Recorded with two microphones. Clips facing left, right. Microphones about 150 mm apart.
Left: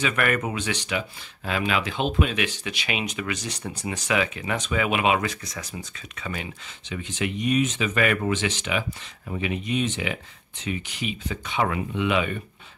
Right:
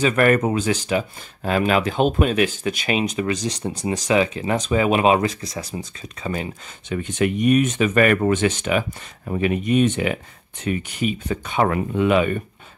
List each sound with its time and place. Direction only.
0.0 s speech: 40° right (ahead or behind)
7.0 s speech: 55° right (ahead or behind)